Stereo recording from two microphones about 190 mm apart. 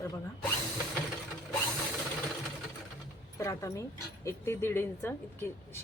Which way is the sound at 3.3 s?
15° left (ahead or behind).